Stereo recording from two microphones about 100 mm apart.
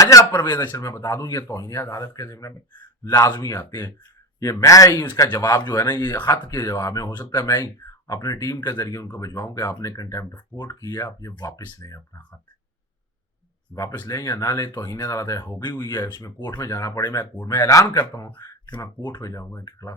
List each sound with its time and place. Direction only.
0.0 s a sound: 35° left (ahead or behind)
0.4 s speech: 45° left (ahead or behind)
0.8 s speech: 30° left (ahead or behind)
5.5 s speech: 20° left (ahead or behind)
5.9 s speech: 40° left (ahead or behind)
13.7 s speech: 35° left (ahead or behind)
18.9 s speech: 45° left (ahead or behind)
19.2 s speech: 35° left (ahead or behind)